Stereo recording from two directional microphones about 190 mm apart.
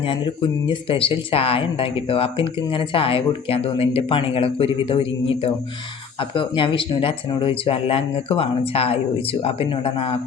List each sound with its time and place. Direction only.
0.0 s speech: 25° left (ahead or behind)
6.1 s speech: 25° left (ahead or behind)